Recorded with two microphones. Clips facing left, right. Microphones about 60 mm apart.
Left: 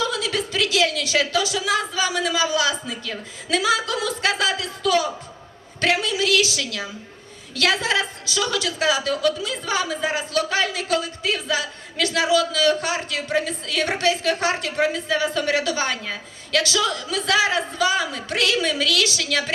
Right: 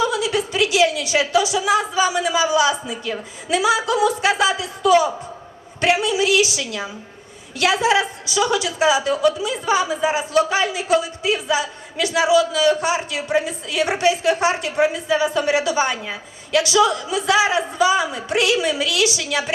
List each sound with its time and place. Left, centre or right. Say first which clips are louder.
0.0 s a woman's voice: right 4 dB; centre